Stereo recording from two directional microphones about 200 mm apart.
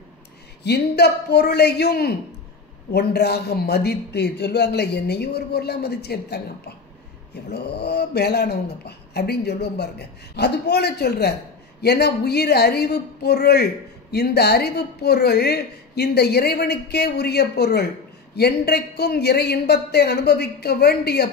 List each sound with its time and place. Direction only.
0.7 s a man's voice: 55° left (ahead or behind)